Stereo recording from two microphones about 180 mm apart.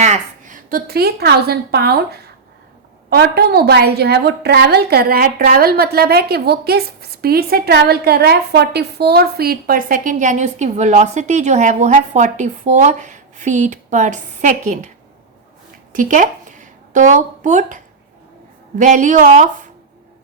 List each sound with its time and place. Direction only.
0.0 s a woman's voice: 40° right (ahead or behind)
15.9 s a woman's voice: 45° right (ahead or behind)